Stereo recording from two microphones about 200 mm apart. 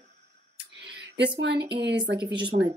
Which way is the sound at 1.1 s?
60° right (ahead or behind).